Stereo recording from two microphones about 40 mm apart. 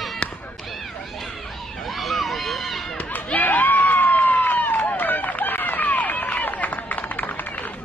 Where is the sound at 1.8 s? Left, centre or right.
Centre.